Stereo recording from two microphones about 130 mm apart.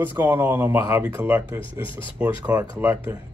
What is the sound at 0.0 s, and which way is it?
Speech, 15° right (ahead or behind).